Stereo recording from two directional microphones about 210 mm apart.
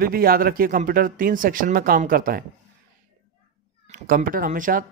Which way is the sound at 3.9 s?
40° right (ahead or behind).